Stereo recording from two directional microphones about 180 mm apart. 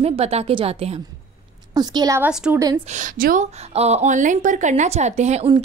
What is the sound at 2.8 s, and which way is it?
A woman's voice, 40° right (ahead or behind).